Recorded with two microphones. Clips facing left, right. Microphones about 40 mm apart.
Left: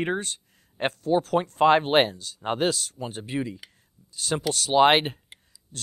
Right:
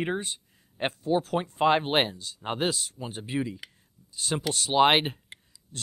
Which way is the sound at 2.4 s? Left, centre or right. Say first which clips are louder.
Left 4 dB; centre.